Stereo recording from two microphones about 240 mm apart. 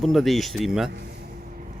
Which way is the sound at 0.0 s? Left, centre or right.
Centre.